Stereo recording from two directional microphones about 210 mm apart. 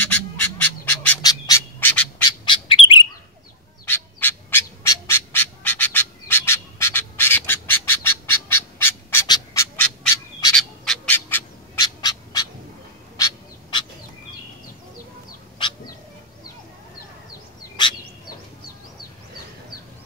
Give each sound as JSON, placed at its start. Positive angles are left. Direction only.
{"t": 0.0, "sound": "bird", "side_deg": 10}
{"t": 2.4, "sound": "bird", "side_deg": 20}
{"t": 3.8, "sound": "bird", "side_deg": 10}
{"t": 17.8, "sound": "bird", "side_deg": 20}